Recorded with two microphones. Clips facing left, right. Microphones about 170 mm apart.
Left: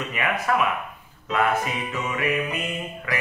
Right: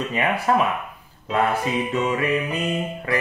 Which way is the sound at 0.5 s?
30° right (ahead or behind).